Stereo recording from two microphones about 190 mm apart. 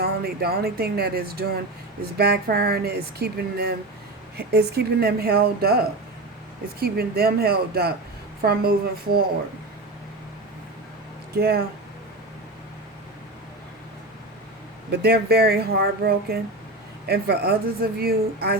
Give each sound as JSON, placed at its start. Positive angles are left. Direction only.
{"t": 0.0, "sound": "a woman's voice", "side_deg": -55}
{"t": 11.3, "sound": "a woman's voice", "side_deg": -55}
{"t": 14.8, "sound": "speech", "side_deg": -55}